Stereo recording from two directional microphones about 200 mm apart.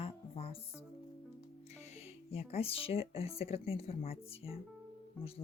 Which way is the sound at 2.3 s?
30° left (ahead or behind).